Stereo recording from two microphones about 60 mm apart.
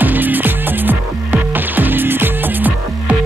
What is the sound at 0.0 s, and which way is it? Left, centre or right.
Music, right.